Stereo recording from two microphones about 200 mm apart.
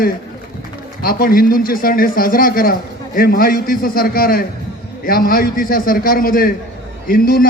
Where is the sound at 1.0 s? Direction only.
45° left (ahead or behind).